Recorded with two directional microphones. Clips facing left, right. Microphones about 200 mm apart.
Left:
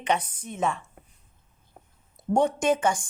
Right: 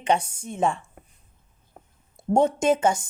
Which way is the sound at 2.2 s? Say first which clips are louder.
Right 3 dB; 25° right (ahead or behind).